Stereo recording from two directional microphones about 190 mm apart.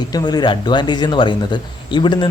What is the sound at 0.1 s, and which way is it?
Speech, 20° left (ahead or behind).